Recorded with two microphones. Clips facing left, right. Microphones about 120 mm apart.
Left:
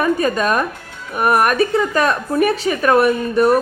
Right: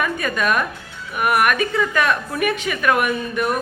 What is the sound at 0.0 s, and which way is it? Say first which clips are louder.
A woman's voice: left 5 dB; 35° left (ahead or behind).